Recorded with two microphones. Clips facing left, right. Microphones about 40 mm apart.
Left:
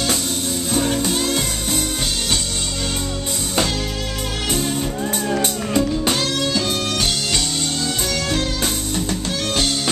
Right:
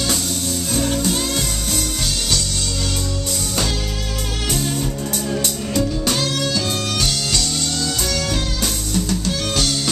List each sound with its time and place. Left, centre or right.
0.7 s music: centre
4.5 s music: centre
5.3 s music: left
5.8 s music: centre
8.9 s music: centre